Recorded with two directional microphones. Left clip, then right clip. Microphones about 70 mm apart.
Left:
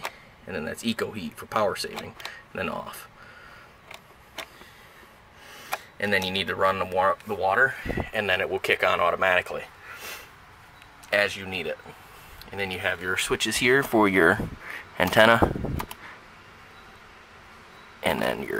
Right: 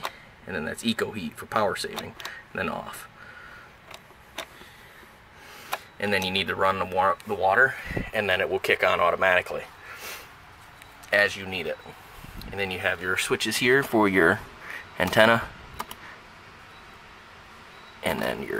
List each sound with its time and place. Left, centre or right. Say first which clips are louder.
0.0 s speech: right 1 dB; centre
5.6 s speech: left 1 dB; centre
18.0 s speech: left 2 dB; centre